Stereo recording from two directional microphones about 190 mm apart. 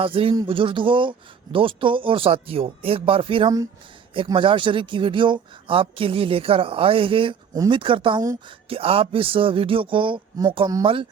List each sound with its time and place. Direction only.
0.0 s speech: 30° right (ahead or behind)